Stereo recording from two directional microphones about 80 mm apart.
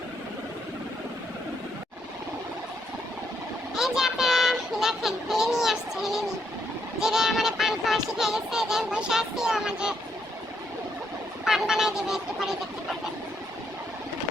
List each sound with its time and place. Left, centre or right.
3.8 s child singing: centre
11.4 s speech: centre